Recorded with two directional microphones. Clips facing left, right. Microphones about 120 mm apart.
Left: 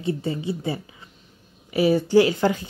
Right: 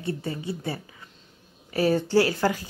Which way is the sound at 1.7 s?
15° left (ahead or behind).